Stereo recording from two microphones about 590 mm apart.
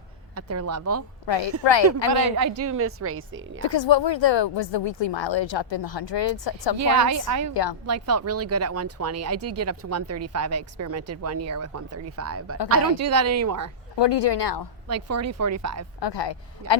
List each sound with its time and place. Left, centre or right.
0.3 s speech: right
1.3 s speech: left
2.0 s speech: right
3.7 s speech: left
6.7 s speech: right
7.5 s speech: left
7.9 s speech: right
13.9 s speech: left
14.8 s speech: right
16.0 s speech: left